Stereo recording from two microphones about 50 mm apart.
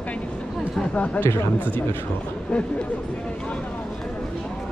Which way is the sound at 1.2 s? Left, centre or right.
Left.